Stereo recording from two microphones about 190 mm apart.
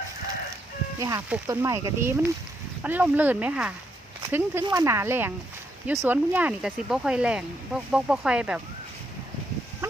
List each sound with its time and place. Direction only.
0.9 s speech: 15° right (ahead or behind)